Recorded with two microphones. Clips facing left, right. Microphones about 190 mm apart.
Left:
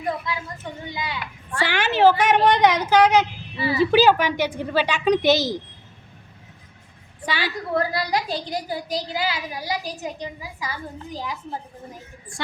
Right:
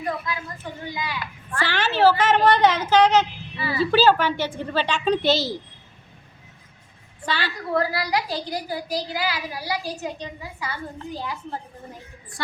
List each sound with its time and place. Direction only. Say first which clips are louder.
0.9 s a sound: right 1 dB; 25° left (ahead or behind)
1.6 s a woman's voice: left 2 dB; 15° left (ahead or behind)
7.3 s a woman's voice: left 1 dB; 10° left (ahead or behind)